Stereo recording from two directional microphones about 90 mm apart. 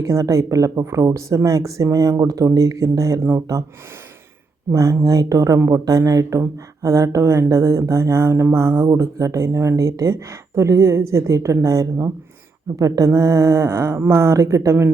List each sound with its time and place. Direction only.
0.0 s speech: 35° right (ahead or behind)
4.7 s speech: 35° right (ahead or behind)